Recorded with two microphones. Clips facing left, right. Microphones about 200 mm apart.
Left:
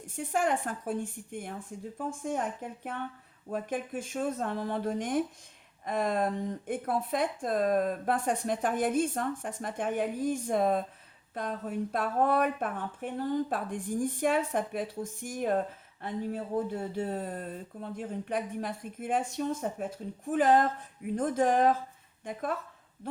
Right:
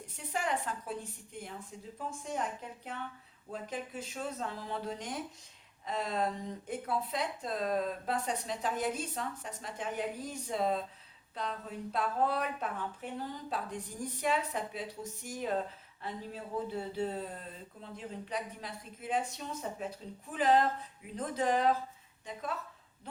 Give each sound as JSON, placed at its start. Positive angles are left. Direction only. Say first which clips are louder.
{"t": 0.2, "sound": "speech", "louder": "left 6 dB", "side_deg": 50}